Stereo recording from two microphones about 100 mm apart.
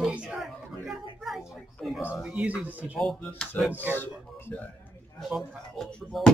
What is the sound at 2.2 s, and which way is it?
Speech, 15° right (ahead or behind).